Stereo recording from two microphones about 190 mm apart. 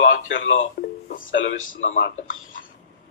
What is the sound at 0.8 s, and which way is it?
Speech, 60° left (ahead or behind).